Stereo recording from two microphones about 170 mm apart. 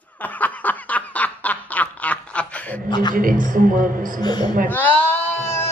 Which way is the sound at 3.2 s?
55° right (ahead or behind).